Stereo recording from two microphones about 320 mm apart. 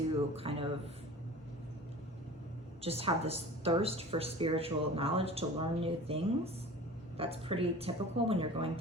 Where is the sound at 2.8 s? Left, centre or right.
Centre.